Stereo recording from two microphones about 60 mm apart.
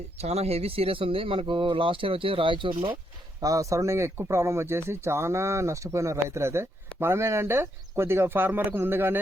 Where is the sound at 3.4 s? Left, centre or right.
Right.